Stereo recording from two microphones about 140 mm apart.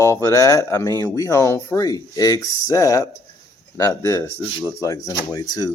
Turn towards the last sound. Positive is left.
turn(degrees=25)  # may be behind; listen again after turning